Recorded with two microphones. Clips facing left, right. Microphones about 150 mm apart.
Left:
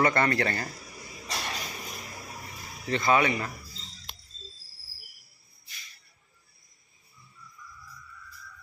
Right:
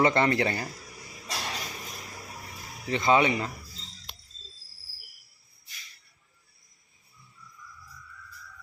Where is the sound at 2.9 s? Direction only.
20° right (ahead or behind).